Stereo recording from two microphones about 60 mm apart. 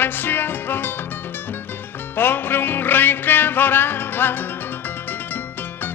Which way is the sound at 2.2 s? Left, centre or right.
Left.